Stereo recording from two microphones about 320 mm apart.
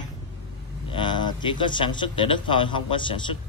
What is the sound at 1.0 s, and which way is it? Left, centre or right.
A man's voice, centre.